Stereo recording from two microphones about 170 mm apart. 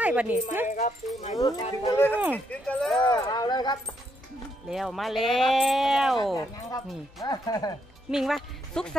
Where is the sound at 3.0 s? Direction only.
25° left (ahead or behind).